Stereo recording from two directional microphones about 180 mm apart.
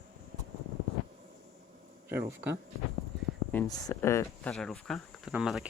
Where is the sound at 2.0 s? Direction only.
10° right (ahead or behind).